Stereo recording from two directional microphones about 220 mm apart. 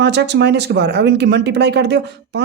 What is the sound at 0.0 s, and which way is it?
Speech, 50° right (ahead or behind).